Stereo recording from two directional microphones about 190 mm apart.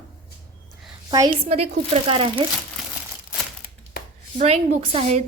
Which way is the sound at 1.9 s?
30° right (ahead or behind).